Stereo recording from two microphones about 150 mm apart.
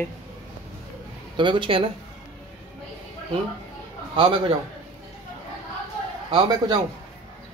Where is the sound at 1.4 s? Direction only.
35° right (ahead or behind).